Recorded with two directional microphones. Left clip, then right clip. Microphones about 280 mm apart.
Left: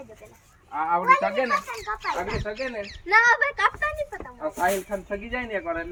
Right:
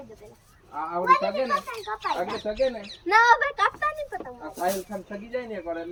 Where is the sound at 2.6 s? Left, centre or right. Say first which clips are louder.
Right 5 dB; right.